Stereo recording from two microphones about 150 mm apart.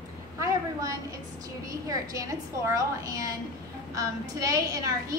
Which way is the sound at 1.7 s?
20° right (ahead or behind).